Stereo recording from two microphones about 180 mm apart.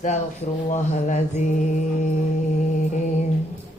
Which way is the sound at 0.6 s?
40° left (ahead or behind).